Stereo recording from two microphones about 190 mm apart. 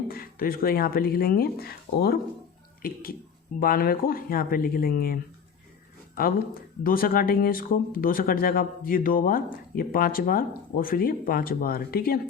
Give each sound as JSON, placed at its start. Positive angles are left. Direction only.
{"t": 0.1, "sound": "speech", "side_deg": 50}